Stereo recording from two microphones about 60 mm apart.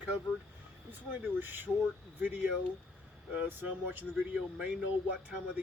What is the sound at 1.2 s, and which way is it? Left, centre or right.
Speech, right.